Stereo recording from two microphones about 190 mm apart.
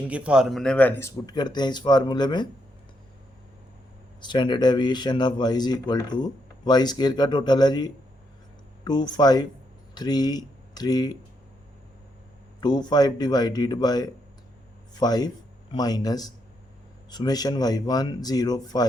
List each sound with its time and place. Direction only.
0.1 s speech: 5° right (ahead or behind); by 2.5 s 25° left (ahead or behind)
4.2 s speech: 25° left (ahead or behind)
12.5 s speech: 25° left (ahead or behind)